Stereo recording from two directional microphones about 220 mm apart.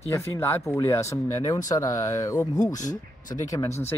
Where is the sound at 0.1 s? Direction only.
15° left (ahead or behind).